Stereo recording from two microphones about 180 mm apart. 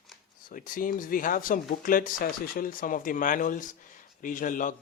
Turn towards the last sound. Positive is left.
turn(degrees=50)  # may be behind; listen again after turning